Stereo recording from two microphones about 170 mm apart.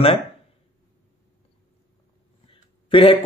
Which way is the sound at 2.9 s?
30° left (ahead or behind).